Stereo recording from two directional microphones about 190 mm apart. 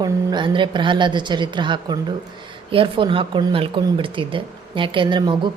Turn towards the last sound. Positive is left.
turn(degrees=-25)  # may be behind; listen again after turning